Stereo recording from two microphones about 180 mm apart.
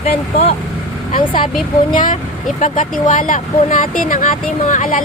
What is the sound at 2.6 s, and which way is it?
Speech, 45° left (ahead or behind).